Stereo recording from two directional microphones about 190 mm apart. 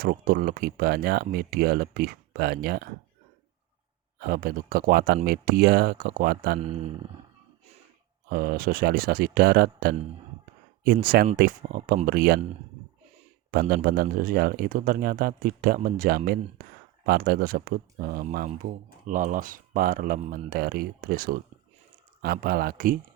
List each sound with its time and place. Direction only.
0.0 s a man's voice: 50° right (ahead or behind)
4.2 s a man's voice: 50° right (ahead or behind)
6.6 s speech: 35° right (ahead or behind)
8.3 s a man's voice: 50° right (ahead or behind)
13.5 s a man's voice: 50° right (ahead or behind)